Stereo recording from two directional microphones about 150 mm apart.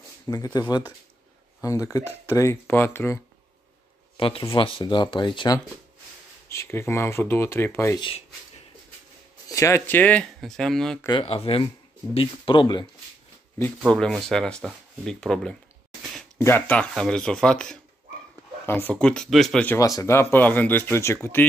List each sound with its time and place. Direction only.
0.3 s speech: 25° left (ahead or behind)
4.2 s speech: 35° left (ahead or behind)
6.5 s speech: 15° left (ahead or behind)
9.5 s speech: 20° left (ahead or behind); by 11.1 s 5° left (ahead or behind)
11.1 s speech: 35° left (ahead or behind)
13.8 s speech: 5° left (ahead or behind)
20.0 s speech: 15° left (ahead or behind)